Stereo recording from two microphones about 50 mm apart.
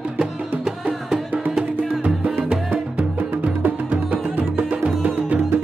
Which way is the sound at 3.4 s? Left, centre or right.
Right.